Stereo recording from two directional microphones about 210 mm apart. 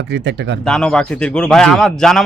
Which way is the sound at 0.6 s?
5° left (ahead or behind).